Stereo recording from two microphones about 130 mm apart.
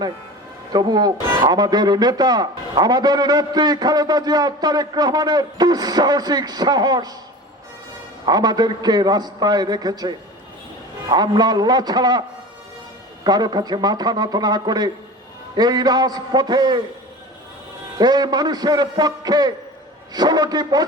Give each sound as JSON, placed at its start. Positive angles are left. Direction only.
{"t": 0.7, "sound": "a man's voice", "side_deg": -30}
{"t": 8.2, "sound": "a man's voice", "side_deg": -30}
{"t": 13.2, "sound": "a man's voice", "side_deg": -30}
{"t": 17.9, "sound": "a man's voice", "side_deg": -30}